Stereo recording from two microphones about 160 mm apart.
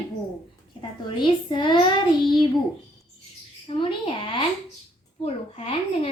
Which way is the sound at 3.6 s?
30° left (ahead or behind).